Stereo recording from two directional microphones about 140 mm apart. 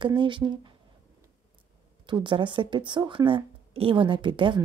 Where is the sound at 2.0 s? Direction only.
35° right (ahead or behind).